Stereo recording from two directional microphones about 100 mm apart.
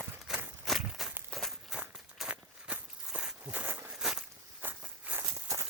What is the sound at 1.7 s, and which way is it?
Walk, 10° right (ahead or behind).